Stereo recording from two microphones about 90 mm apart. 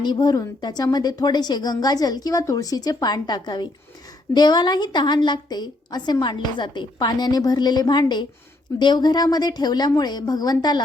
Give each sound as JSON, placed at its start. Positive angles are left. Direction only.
{"t": 0.0, "sound": "a woman's voice", "side_deg": 55}